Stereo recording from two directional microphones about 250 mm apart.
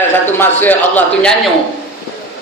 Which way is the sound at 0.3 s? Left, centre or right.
Centre.